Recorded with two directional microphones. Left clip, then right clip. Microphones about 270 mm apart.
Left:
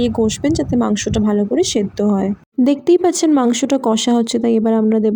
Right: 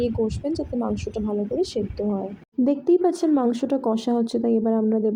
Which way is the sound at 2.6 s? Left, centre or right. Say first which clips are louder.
Left 6 dB; left.